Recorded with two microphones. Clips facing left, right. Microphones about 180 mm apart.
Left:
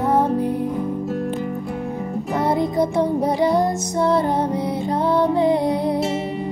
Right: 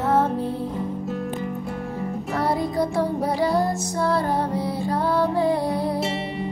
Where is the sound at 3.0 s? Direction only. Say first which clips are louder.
Left 4 dB; 20° left (ahead or behind).